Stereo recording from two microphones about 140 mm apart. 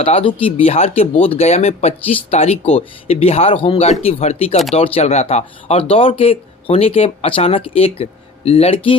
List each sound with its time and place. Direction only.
0.0 s speech: 40° left (ahead or behind)